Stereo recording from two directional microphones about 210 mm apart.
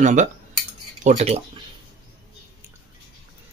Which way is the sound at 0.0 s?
35° right (ahead or behind).